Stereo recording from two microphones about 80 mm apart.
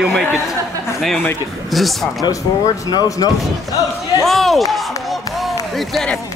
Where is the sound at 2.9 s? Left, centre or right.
Left.